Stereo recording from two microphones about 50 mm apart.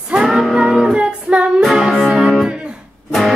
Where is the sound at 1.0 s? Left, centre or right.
Right.